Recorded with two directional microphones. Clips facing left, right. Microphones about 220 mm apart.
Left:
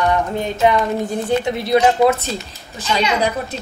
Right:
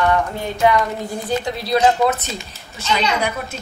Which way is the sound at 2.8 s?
35° left (ahead or behind).